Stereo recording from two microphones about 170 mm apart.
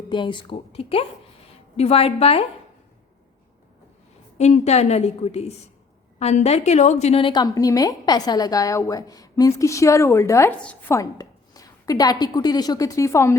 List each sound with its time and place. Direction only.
0.1 s a woman's voice: 30° left (ahead or behind)
4.4 s a woman's voice: 40° left (ahead or behind); by 10.9 s 5° left (ahead or behind)
10.9 s a woman's voice: 20° left (ahead or behind)